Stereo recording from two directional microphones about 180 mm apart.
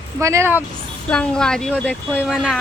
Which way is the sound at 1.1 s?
5° left (ahead or behind).